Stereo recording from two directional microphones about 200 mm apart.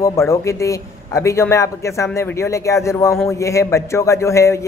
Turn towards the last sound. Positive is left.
turn(degrees=15)  # may be behind; listen again after turning